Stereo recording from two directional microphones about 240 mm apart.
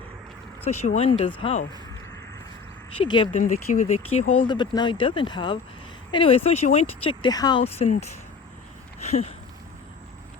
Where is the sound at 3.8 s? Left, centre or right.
Left.